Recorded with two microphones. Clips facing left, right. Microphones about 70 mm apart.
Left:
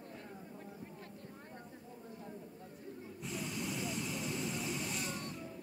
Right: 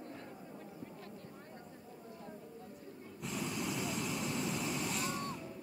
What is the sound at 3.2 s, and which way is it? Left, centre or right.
Vehicle, centre.